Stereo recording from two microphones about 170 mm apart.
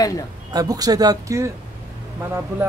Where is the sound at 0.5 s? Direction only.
20° right (ahead or behind).